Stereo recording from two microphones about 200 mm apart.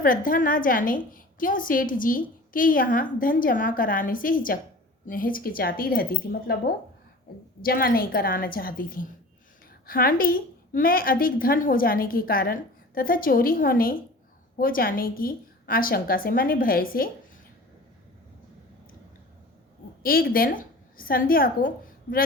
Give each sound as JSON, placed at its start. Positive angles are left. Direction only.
{"t": 0.0, "sound": "a woman's voice", "side_deg": 45}
{"t": 7.6, "sound": "a woman's voice", "side_deg": 45}
{"t": 20.0, "sound": "a woman's voice", "side_deg": 45}